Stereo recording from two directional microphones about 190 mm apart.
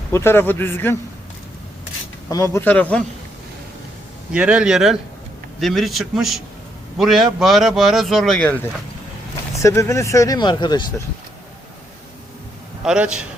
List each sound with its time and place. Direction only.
0.1 s speech: 15° left (ahead or behind)
2.3 s speech: 15° left (ahead or behind)
4.3 s a man's voice: 5° right (ahead or behind)
9.6 s speech: 15° left (ahead or behind)
12.8 s a man's voice: 5° right (ahead or behind)